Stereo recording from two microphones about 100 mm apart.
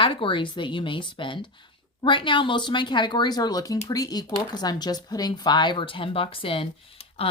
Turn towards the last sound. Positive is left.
turn(degrees=65)  # may be behind; listen again after turning